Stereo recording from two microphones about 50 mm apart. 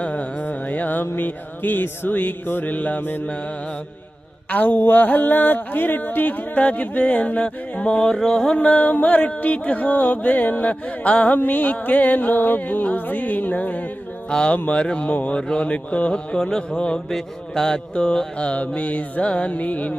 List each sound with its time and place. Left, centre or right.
0.0 s music: left
4.4 s music: left
8.1 s music: centre
8.5 s music: left
14.3 s mantra: centre
15.1 s music: left
15.4 s mantra: centre